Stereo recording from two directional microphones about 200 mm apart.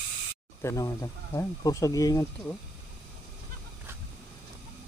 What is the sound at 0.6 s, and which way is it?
Speech, 15° left (ahead or behind).